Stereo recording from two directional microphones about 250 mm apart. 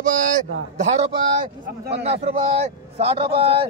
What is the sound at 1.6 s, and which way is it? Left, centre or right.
Speech, right.